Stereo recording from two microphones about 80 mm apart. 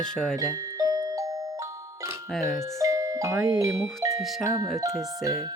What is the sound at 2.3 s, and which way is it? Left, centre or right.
Speech, centre.